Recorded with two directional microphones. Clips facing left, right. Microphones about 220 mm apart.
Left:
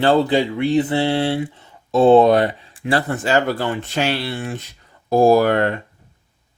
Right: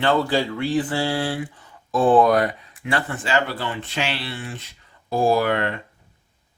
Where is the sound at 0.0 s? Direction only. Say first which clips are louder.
Left 5 dB; 35° left (ahead or behind).